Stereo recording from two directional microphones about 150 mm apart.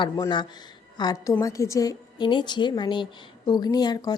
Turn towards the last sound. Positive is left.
turn(degrees=25)  # may be behind; listen again after turning